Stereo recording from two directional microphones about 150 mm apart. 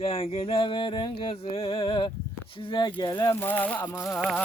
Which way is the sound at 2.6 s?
30° left (ahead or behind).